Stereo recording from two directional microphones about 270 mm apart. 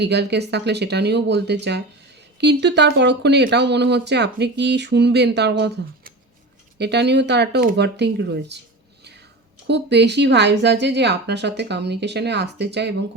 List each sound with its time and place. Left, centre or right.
0.0 s speech: right
9.6 s speech: right